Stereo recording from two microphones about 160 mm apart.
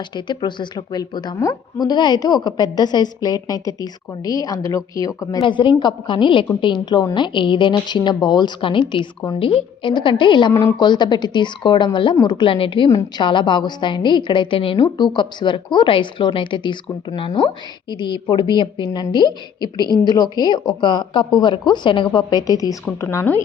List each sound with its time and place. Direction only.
0.3 s a woman's voice: 30° left (ahead or behind)
10.5 s a woman's voice: 15° left (ahead or behind)
10.8 s a woman's voice: 25° left (ahead or behind)